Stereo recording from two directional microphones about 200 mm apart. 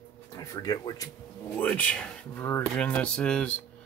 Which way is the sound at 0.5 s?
20° left (ahead or behind).